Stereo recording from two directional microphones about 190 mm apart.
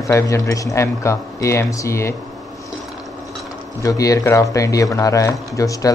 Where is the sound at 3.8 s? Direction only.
15° left (ahead or behind).